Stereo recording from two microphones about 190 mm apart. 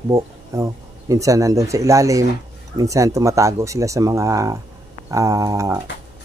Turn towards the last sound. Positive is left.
turn(degrees=-15)  # may be behind; listen again after turning